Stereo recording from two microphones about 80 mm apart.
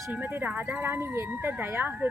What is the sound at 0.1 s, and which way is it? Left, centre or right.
Speech, right.